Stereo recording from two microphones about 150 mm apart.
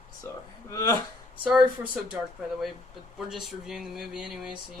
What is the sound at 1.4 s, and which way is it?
Speech, 10° right (ahead or behind).